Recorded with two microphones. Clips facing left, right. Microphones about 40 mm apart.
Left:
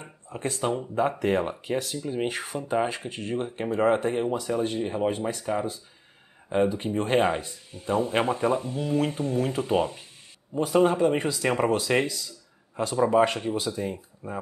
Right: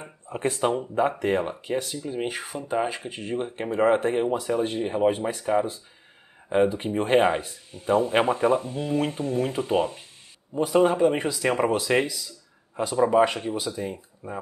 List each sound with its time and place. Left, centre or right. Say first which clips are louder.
0.0 s a sound: right 4 dB; right
0.7 s speech: right 2 dB; centre
6.8 s speech: right 3 dB; centre